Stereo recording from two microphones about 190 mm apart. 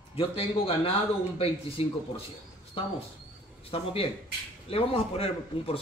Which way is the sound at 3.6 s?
30° left (ahead or behind).